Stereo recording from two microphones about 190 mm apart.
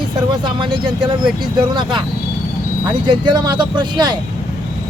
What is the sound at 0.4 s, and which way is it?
Speech, 25° right (ahead or behind).